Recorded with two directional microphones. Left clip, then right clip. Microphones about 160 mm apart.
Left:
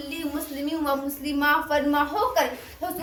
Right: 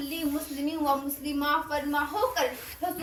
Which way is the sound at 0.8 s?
40° left (ahead or behind).